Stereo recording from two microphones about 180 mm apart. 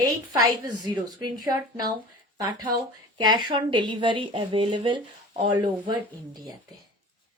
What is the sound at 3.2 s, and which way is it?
A woman's voice, 25° right (ahead or behind).